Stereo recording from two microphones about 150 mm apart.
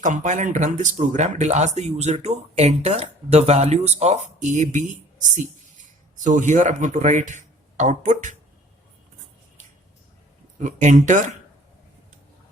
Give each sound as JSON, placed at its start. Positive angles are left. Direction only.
{"t": 0.0, "sound": "speech", "side_deg": -55}
{"t": 6.2, "sound": "speech", "side_deg": -55}
{"t": 10.6, "sound": "speech", "side_deg": -55}